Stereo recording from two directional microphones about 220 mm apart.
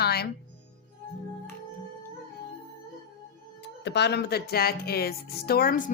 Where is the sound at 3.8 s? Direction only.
50° left (ahead or behind).